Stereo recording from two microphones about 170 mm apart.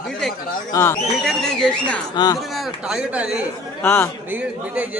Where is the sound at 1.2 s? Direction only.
Centre (ahead or behind).